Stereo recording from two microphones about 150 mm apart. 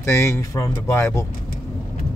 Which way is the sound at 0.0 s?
15° left (ahead or behind).